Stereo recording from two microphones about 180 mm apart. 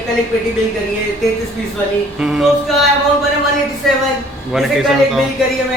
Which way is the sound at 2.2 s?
5° right (ahead or behind).